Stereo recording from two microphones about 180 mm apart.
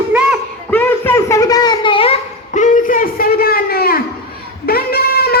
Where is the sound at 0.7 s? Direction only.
10° left (ahead or behind); by 4.0 s 60° left (ahead or behind).